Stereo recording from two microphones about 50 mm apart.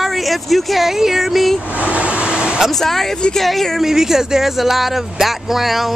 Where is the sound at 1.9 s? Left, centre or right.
Right.